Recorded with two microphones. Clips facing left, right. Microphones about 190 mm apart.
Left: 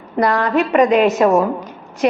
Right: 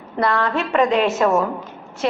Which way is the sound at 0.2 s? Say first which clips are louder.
Left 4 dB; 15° left (ahead or behind).